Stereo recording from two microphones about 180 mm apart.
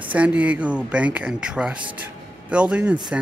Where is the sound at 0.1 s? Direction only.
5° right (ahead or behind).